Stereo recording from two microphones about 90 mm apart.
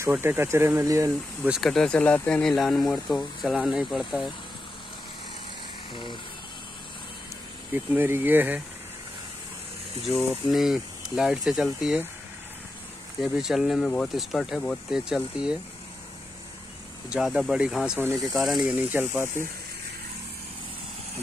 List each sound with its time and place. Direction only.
0.0 s speech: 25° right (ahead or behind)
1.6 s speech: 5° left (ahead or behind)
2.5 s speech: centre (ahead or behind)
7.7 s speech: 25° right (ahead or behind)
10.5 s speech: 5° right (ahead or behind)
13.2 s speech: 5° right (ahead or behind)
17.1 s speech: 5° right (ahead or behind)
18.8 s speech: 25° right (ahead or behind)